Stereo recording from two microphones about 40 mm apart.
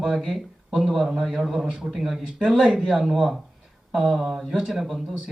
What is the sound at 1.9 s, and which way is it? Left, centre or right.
A man's voice, centre.